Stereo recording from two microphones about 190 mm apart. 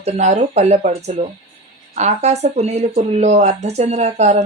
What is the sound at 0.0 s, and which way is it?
Speech, 35° right (ahead or behind).